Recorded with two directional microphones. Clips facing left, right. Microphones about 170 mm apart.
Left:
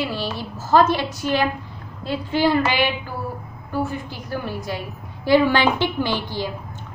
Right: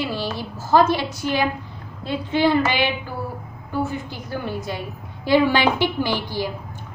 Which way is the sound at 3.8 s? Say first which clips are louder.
Even; 20° right (ahead or behind).